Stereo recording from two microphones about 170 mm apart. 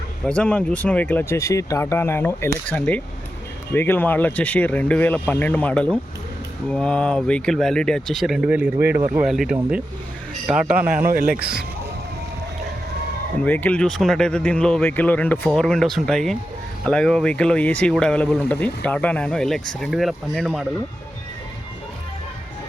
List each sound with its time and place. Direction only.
0.3 s speech: 5° left (ahead or behind)
10.9 s speech: 60° right (ahead or behind)
13.4 s speech: 10° left (ahead or behind)